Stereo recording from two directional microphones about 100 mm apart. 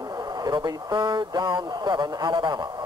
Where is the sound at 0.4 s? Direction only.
45° right (ahead or behind).